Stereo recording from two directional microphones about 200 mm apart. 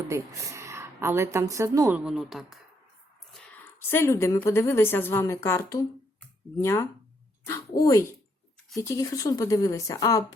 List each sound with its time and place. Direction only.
0.1 s speech: 15° right (ahead or behind)
3.6 s a woman's voice: 10° left (ahead or behind)